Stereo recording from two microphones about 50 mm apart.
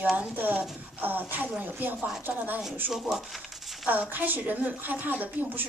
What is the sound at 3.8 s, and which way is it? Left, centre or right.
A woman's voice, right.